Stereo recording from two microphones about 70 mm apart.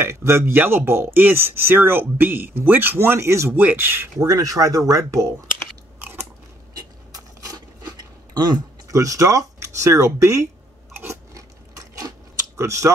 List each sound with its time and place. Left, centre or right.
0.0 s speech: right
3.2 s speech: right
3.5 s speech: right
4.2 s speech: right
6.7 s a sound: right
8.4 s a sound: right
8.9 s speech: right
11.3 s a sound: right
12.5 s speech: right